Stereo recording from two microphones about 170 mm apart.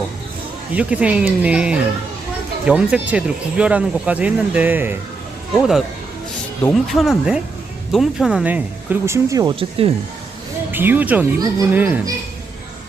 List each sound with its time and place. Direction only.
0.8 s speech: 5° right (ahead or behind)
9.6 s speech: 35° right (ahead or behind)
10.7 s speech: 10° right (ahead or behind)